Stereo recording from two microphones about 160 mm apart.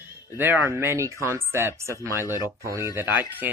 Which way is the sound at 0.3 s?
15° right (ahead or behind).